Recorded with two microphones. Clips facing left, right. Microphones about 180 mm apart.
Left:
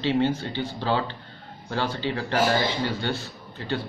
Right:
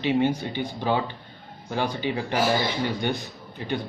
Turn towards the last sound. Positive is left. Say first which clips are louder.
# even
turn(degrees=-15)  # may be behind; listen again after turning